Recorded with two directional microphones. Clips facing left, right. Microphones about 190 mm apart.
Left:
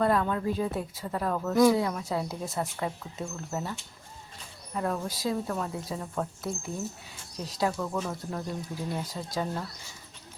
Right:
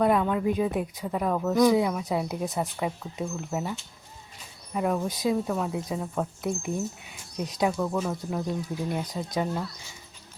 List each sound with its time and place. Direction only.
0.0 s speech: 15° right (ahead or behind)
5.5 s speech: 10° right (ahead or behind)
7.9 s speech: centre (ahead or behind)
8.7 s speech: 20° right (ahead or behind)